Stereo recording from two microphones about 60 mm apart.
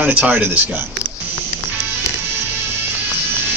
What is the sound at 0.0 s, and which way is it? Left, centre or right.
Speech, right.